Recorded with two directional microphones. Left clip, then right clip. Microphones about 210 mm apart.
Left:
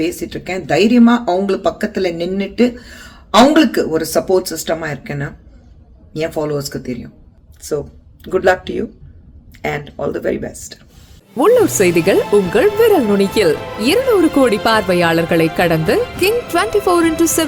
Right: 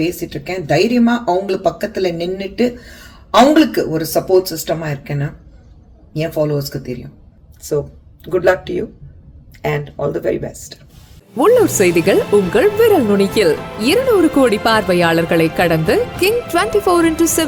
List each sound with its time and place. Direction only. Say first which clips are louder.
0.0 s speech: even; 20° left (ahead or behind)
8.2 s speech: even; 10° left (ahead or behind)